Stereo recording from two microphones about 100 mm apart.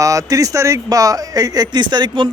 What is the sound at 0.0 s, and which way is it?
Speech, 35° right (ahead or behind).